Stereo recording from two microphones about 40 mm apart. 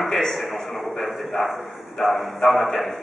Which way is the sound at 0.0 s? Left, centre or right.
Centre.